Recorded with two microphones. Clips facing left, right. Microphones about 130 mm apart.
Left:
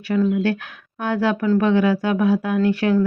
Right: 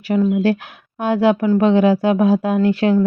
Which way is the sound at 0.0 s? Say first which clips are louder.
Right 3 dB; 20° right (ahead or behind).